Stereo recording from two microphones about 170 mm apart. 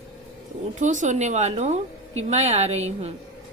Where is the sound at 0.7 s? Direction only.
45° right (ahead or behind).